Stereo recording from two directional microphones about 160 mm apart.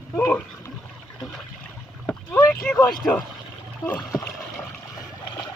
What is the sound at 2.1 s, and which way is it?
Boat, 15° left (ahead or behind).